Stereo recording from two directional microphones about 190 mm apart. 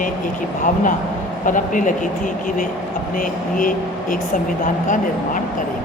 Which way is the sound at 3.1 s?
45° left (ahead or behind).